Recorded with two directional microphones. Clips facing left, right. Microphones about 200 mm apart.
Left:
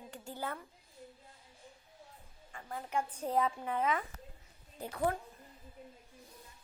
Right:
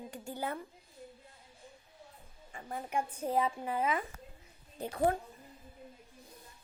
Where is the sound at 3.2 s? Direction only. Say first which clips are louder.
Right 1 dB; 5° right (ahead or behind).